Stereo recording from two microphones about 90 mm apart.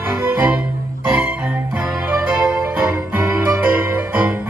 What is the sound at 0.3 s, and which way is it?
Music, 15° right (ahead or behind).